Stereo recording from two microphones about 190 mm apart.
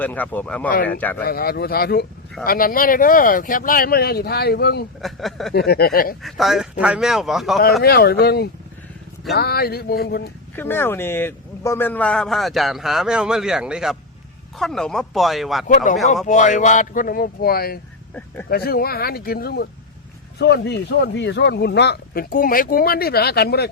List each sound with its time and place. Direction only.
0.0 s speech: 10° left (ahead or behind)
1.2 s speech: 50° left (ahead or behind)
4.9 s a man's voice: centre (ahead or behind)
5.5 s speech: 55° left (ahead or behind)
6.2 s a man's voice: centre (ahead or behind)
7.8 s speech: 55° left (ahead or behind)
10.5 s a man's voice: 10° left (ahead or behind)
15.6 s speech: 45° left (ahead or behind); by 23.6 s 60° left (ahead or behind)